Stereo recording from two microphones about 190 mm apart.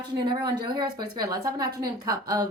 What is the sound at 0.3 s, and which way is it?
A woman's voice, 25° right (ahead or behind).